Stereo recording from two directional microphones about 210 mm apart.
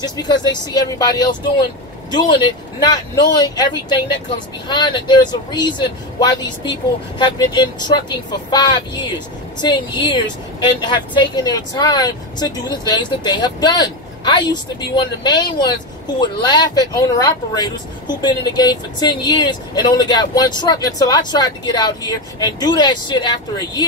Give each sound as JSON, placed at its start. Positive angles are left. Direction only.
{"t": 0.0, "sound": "speech", "side_deg": 20}
{"t": 4.6, "sound": "speech", "side_deg": 20}